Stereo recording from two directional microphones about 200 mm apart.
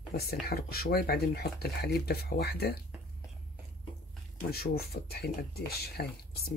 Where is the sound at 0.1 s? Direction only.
50° left (ahead or behind).